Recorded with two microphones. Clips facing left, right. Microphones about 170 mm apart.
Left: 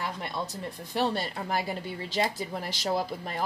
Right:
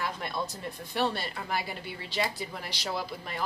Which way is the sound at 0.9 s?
35° left (ahead or behind).